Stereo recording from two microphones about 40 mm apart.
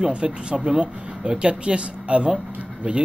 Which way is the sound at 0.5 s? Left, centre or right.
Centre.